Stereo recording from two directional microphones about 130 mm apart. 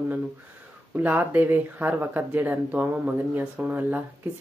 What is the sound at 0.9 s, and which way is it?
Speech, 15° right (ahead or behind).